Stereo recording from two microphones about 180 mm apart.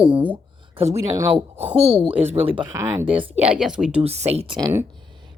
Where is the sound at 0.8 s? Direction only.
35° right (ahead or behind).